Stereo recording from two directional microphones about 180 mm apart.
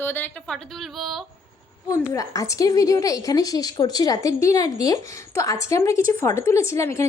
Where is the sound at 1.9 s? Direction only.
20° left (ahead or behind).